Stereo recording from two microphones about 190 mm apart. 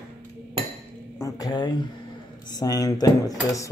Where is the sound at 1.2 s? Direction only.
20° left (ahead or behind).